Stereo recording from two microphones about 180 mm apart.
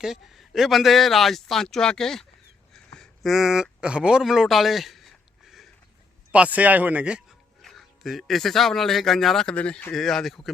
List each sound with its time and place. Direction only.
0.0 s speech: centre (ahead or behind)
2.7 s a sound: 5° left (ahead or behind)
6.3 s speech: 5° right (ahead or behind)